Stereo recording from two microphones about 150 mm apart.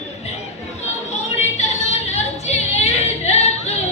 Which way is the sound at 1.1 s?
50° left (ahead or behind).